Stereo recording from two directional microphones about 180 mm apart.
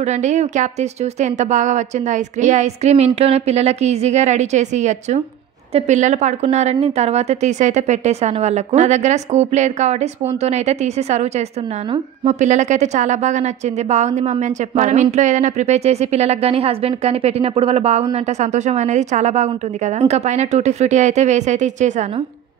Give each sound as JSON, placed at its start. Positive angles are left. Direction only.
{"t": 0.0, "sound": "a woman's voice", "side_deg": -40}